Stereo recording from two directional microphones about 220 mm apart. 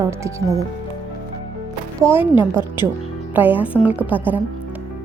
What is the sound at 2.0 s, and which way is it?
Speech, 10° right (ahead or behind).